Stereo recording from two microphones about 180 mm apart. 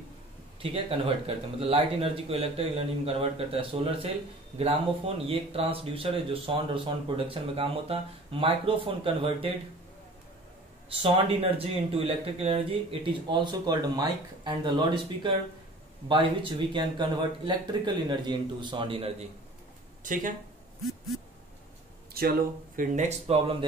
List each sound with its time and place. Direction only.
0.6 s speech: 30° right (ahead or behind)
11.0 s speech: 30° right (ahead or behind)
20.0 s speech: 45° right (ahead or behind)
22.1 s speech: 55° right (ahead or behind); by 23.6 s 30° right (ahead or behind)